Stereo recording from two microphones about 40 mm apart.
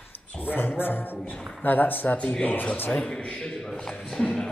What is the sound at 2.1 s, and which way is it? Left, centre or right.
Speech, left.